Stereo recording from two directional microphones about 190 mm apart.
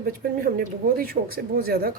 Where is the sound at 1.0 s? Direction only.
50° right (ahead or behind).